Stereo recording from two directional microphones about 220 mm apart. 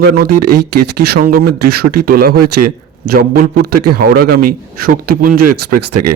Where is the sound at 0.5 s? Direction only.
45° right (ahead or behind).